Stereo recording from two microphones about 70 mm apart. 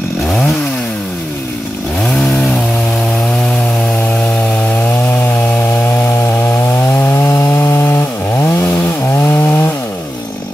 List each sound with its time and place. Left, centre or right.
7.0 s chainsaw: left